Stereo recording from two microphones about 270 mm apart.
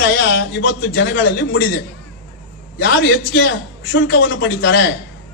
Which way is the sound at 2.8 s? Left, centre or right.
Left.